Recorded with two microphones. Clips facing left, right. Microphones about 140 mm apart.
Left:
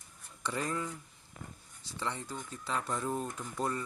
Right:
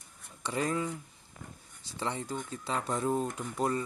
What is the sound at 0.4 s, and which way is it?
Speech, 15° right (ahead or behind).